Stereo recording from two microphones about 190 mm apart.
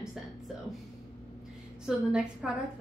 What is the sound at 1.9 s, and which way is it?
Speech, 5° right (ahead or behind).